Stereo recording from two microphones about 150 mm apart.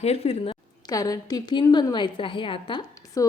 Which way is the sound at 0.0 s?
45° left (ahead or behind).